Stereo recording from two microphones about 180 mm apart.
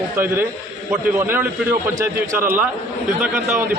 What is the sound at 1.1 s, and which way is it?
A man's voice, 10° right (ahead or behind).